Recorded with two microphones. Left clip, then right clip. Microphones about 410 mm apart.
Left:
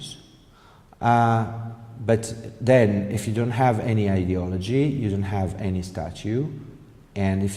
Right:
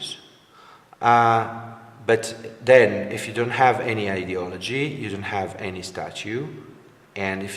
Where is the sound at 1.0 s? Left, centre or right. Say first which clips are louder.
Right 4 dB; left.